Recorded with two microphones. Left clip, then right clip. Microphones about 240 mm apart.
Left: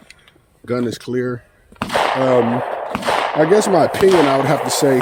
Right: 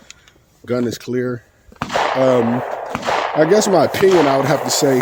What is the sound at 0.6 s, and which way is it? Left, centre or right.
Speech, right.